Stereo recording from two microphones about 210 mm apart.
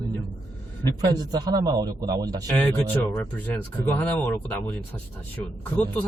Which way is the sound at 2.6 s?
5° left (ahead or behind).